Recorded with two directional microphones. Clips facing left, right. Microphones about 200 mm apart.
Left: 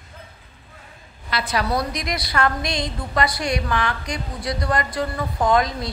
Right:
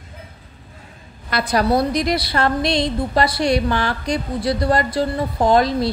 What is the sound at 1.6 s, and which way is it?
A woman's voice, 30° right (ahead or behind).